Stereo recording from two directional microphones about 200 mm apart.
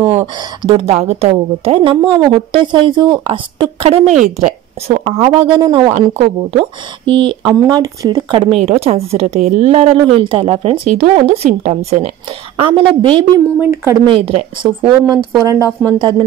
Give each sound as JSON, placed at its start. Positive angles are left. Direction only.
{"t": 0.2, "sound": "a woman's voice", "side_deg": -25}
{"t": 5.9, "sound": "a woman's voice", "side_deg": -30}
{"t": 13.6, "sound": "speech", "side_deg": -10}
{"t": 14.0, "sound": "a woman's voice", "side_deg": -25}
{"t": 15.4, "sound": "speech", "side_deg": -15}